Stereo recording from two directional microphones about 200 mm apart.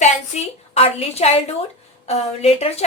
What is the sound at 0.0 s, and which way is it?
A woman's voice, 30° left (ahead or behind).